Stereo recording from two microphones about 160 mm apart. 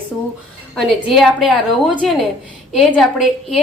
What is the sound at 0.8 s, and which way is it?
Speech, centre (ahead or behind).